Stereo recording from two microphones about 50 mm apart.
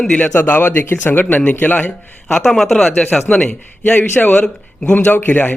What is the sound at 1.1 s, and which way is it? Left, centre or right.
Speech, left.